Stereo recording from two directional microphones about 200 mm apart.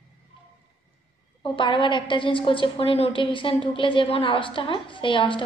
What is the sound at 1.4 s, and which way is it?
A woman's voice, 25° left (ahead or behind).